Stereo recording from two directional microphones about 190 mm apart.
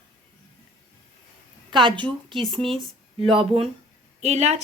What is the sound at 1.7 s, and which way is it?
Speech, 25° right (ahead or behind).